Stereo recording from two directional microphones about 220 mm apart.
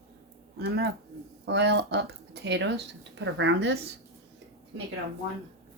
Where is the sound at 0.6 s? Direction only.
50° right (ahead or behind).